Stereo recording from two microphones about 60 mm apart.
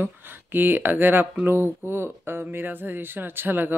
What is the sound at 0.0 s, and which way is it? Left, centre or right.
Speech, right.